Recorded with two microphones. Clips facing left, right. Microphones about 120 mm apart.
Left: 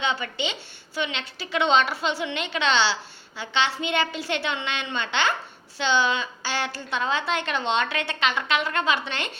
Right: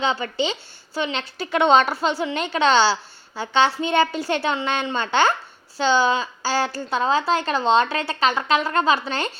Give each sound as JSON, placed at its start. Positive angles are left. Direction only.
{"t": 0.0, "sound": "a woman's voice", "side_deg": -40}